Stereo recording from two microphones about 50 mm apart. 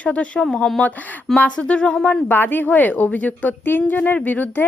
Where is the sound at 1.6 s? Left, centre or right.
Left.